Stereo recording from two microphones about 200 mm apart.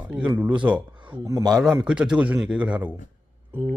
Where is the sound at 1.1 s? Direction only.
20° right (ahead or behind).